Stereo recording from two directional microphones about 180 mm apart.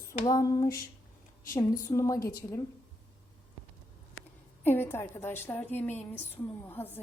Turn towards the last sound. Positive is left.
turn(degrees=10)  # may be behind; listen again after turning